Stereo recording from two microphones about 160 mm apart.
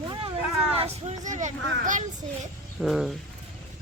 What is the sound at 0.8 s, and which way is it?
A child's voice, 45° right (ahead or behind).